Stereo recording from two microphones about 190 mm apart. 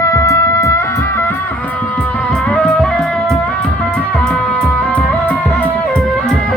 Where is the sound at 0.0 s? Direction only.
15° left (ahead or behind).